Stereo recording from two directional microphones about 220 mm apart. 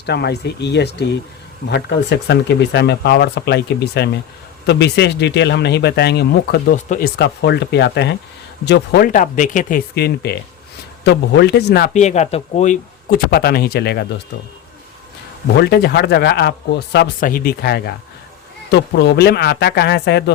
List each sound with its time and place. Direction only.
0.0 s speech: 50° left (ahead or behind)
6.7 s speech: 35° left (ahead or behind)
7.2 s speech: 50° left (ahead or behind)
11.9 s speech: 30° left (ahead or behind); by 14.1 s 50° left (ahead or behind)
15.5 s speech: 50° left (ahead or behind)